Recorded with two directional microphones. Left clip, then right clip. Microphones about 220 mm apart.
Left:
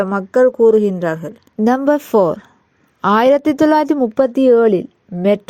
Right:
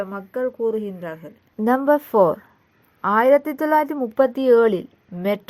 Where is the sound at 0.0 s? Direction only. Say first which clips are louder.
Left 12 dB; 45° left (ahead or behind).